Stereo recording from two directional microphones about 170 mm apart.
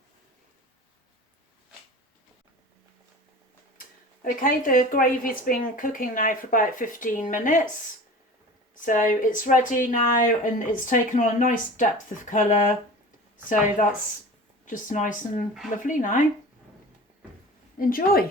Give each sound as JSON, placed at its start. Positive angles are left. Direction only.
{"t": 4.2, "sound": "speech", "side_deg": 55}
{"t": 8.8, "sound": "speech", "side_deg": 50}
{"t": 17.7, "sound": "a woman's voice", "side_deg": 55}